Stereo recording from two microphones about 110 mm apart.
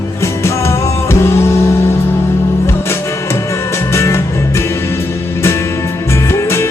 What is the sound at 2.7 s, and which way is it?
Music, 25° left (ahead or behind).